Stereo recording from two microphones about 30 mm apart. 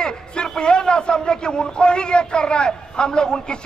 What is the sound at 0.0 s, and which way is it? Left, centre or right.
A man's voice, left.